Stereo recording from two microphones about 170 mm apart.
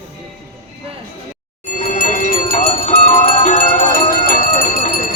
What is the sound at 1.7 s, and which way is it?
Bell, 50° left (ahead or behind).